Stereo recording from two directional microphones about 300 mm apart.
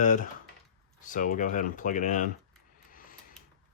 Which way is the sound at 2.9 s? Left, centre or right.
Left.